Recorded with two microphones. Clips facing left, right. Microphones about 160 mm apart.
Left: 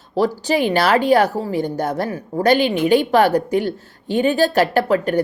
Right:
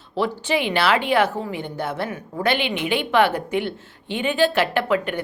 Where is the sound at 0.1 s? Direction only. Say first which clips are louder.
Left 4 dB; 40° left (ahead or behind).